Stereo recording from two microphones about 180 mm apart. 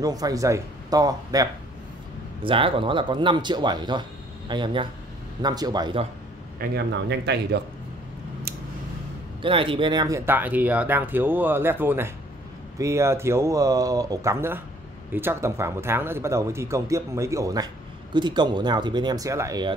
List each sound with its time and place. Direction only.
0.0 s speech: 20° right (ahead or behind)
6.6 s speech: 65° right (ahead or behind)
9.4 s speech: 30° right (ahead or behind)